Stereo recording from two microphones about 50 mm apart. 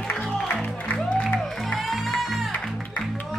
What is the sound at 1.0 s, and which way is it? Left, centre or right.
Music, centre.